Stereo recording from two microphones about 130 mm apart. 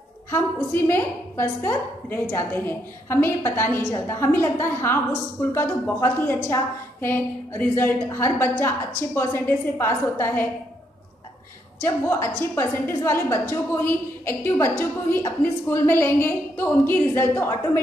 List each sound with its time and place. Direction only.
0.3 s a woman's voice: 15° left (ahead or behind)
11.8 s a woman's voice: 20° left (ahead or behind)